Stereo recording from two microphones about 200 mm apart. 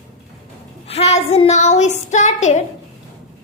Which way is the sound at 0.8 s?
30° left (ahead or behind).